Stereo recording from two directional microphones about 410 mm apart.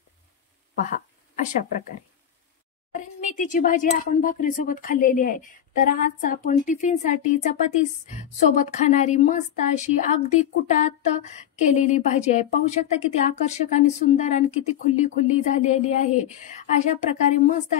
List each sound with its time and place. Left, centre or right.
0.8 s speech: centre
16.8 s speech: centre